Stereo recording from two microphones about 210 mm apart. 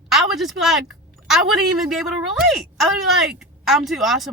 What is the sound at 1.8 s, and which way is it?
Speech, centre (ahead or behind).